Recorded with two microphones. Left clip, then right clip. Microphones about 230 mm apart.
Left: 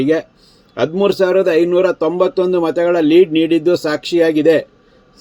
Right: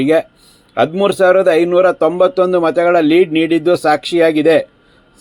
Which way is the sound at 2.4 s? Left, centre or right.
Right.